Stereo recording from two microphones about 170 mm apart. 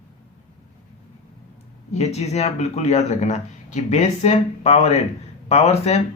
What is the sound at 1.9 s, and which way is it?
Speech, 40° left (ahead or behind).